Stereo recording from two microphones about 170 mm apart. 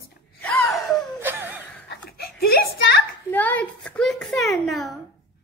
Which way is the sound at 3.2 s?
10° left (ahead or behind).